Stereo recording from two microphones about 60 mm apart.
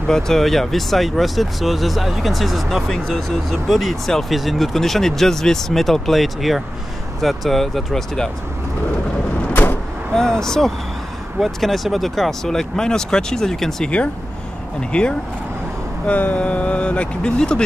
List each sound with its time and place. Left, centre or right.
0.1 s speech: centre
9.5 s vehicle: left
10.1 s vehicle: centre
11.3 s speech: centre